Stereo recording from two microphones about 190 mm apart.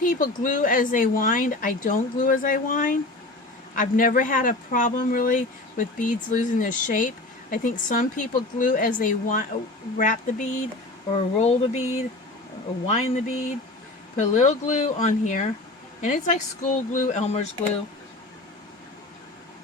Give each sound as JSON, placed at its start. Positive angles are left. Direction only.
{"t": 0.0, "sound": "speech", "side_deg": 45}